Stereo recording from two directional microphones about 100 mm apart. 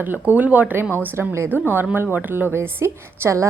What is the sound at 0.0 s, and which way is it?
A woman's voice, 20° right (ahead or behind).